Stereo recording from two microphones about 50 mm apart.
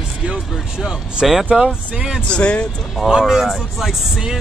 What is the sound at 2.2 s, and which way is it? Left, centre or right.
Speech, centre.